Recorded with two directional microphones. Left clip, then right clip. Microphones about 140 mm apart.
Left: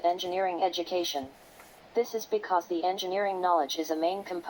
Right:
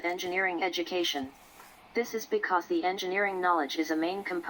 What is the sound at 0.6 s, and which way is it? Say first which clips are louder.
A woman's voice: left 1 dB; 35° right (ahead or behind).